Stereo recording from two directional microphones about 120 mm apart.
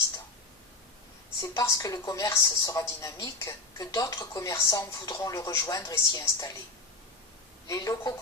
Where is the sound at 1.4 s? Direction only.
30° left (ahead or behind).